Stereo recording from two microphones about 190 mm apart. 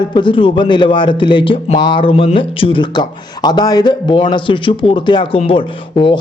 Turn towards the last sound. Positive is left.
turn(degrees=25)  # may be behind; listen again after turning